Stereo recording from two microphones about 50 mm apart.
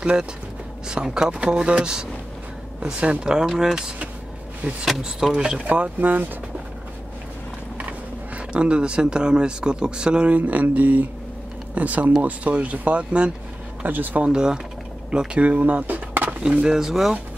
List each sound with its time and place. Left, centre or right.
0.0 s speech: centre
5.0 s speech: centre
5.7 s speech: right
8.4 s speech: right
13.8 s speech: right
14.2 s speech: centre; by 16.3 s right
16.6 s speech: centre